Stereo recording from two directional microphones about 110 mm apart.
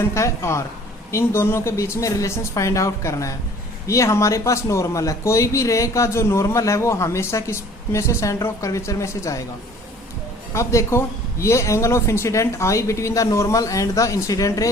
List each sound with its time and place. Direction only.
0.0 s speech: 25° left (ahead or behind)
10.5 s speech: 25° left (ahead or behind)